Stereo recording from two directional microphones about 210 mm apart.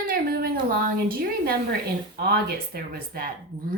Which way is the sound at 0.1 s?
45° right (ahead or behind).